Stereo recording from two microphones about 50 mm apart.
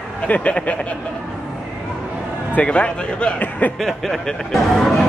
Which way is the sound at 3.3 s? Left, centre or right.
Left.